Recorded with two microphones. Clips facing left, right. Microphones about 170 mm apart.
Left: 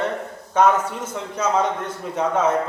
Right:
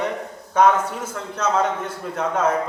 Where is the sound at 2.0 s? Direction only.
10° left (ahead or behind).